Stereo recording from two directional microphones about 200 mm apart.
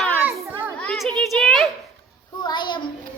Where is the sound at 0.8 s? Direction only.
5° left (ahead or behind).